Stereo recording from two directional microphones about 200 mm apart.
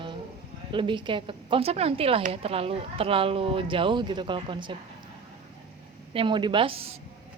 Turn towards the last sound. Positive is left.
turn(degrees=-30)  # may be behind; listen again after turning